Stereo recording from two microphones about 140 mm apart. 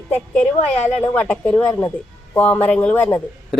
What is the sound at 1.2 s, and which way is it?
Speech, 15° left (ahead or behind).